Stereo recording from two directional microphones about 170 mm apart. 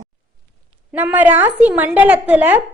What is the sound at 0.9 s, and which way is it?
A woman's voice, 10° right (ahead or behind).